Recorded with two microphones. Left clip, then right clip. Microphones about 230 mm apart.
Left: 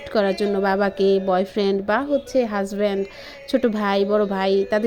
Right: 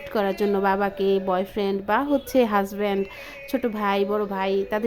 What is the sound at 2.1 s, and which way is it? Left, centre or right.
Speech, centre.